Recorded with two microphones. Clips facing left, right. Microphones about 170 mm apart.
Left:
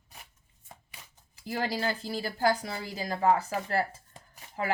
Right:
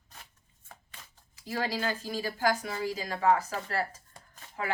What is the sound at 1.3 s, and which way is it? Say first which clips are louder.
A woman's voice: left 1 dB; 35° left (ahead or behind).